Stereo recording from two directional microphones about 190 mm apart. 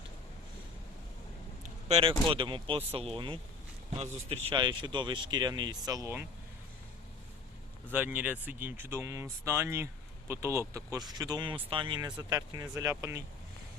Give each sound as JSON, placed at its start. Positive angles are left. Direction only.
{"t": 1.6, "sound": "speech", "side_deg": -30}
{"t": 7.9, "sound": "speech", "side_deg": -10}